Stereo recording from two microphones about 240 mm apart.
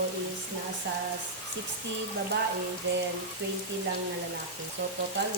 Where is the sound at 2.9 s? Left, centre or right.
Right.